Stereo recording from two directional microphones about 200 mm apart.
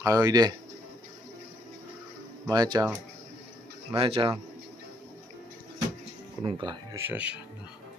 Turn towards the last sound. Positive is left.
turn(degrees=-5)  # may be behind; listen again after turning